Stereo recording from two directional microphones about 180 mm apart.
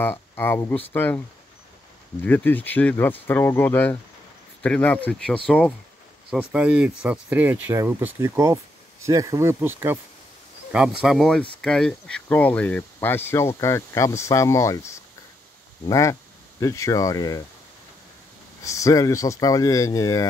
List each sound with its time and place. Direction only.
0.0 s speech: 10° left (ahead or behind)
2.2 s speech: 10° left (ahead or behind)
6.3 s speech: 5° right (ahead or behind)
11.0 s speech: centre (ahead or behind); by 17.4 s 20° left (ahead or behind)
18.6 s speech: 15° left (ahead or behind)